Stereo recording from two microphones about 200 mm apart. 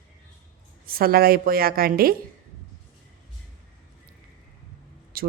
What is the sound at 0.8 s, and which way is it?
A man's voice, 50° right (ahead or behind).